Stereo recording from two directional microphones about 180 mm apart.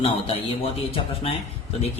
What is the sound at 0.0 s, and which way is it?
A man's voice, 30° left (ahead or behind).